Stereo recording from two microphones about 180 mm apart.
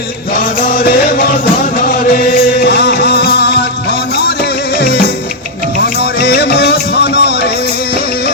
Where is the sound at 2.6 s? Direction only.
65° left (ahead or behind).